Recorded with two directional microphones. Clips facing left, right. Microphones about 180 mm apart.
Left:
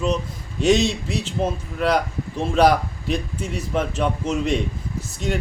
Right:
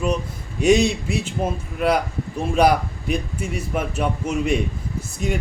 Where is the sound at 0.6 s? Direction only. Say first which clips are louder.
Right 2 dB; 10° right (ahead or behind).